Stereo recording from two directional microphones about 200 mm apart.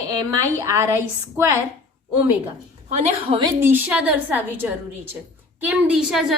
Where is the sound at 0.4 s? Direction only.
15° right (ahead or behind).